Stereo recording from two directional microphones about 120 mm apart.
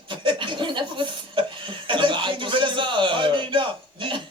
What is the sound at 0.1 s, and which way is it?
Cough, 45° right (ahead or behind).